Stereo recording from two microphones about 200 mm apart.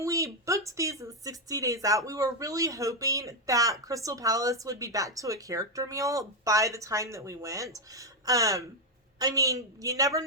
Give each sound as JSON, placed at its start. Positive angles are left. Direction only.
{"t": 0.0, "sound": "speech", "side_deg": -15}